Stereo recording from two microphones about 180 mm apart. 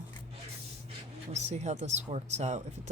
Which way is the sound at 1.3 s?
40° right (ahead or behind).